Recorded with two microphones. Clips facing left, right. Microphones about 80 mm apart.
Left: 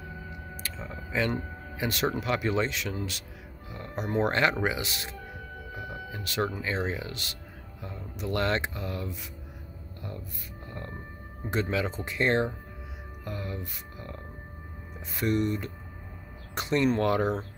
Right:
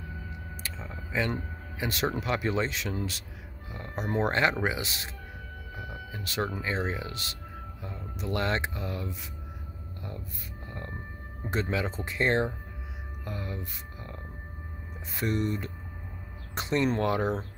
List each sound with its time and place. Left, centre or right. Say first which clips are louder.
1.1 s a sound: left 1 dB; centre
1.9 s speech: left 1 dB; right
6.2 s speech: left 1 dB; right
11.5 s speech: left 1 dB; right
13.2 s music: left 1 dB; right
15.1 s speech: left 2 dB; right